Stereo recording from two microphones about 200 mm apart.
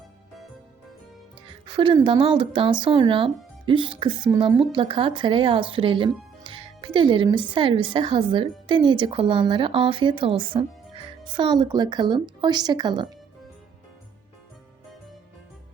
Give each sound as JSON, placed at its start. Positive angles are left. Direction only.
{"t": 1.5, "sound": "speech", "side_deg": -25}